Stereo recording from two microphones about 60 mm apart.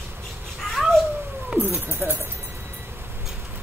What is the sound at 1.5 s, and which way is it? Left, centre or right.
Speech, right.